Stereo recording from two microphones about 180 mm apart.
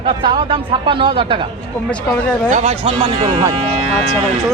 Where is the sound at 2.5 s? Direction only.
35° right (ahead or behind).